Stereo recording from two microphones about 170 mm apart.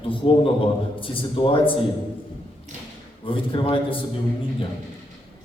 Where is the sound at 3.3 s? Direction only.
30° left (ahead or behind).